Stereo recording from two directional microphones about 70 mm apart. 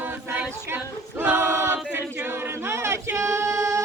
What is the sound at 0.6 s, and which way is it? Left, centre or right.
Choir, right.